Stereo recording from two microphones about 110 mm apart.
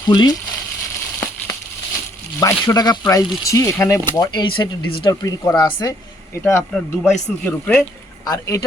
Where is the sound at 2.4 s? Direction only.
30° left (ahead or behind).